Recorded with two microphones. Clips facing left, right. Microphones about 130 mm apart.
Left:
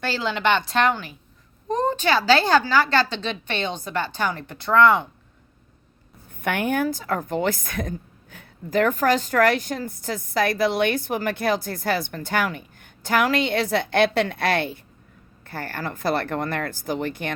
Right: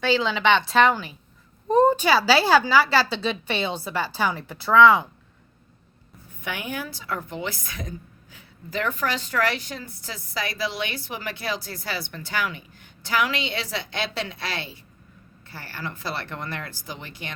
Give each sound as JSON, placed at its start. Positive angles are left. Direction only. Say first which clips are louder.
{"t": 0.0, "sound": "speech", "louder": "right 2 dB", "side_deg": 0}
{"t": 6.4, "sound": "a woman's voice", "louder": "left 9 dB", "side_deg": 55}